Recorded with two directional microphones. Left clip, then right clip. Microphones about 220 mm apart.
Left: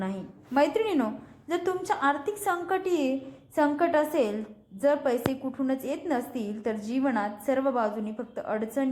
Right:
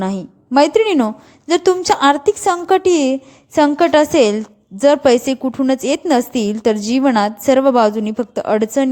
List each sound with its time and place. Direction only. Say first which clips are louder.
0.0 s a woman's voice: right 13 dB; 50° right (ahead or behind)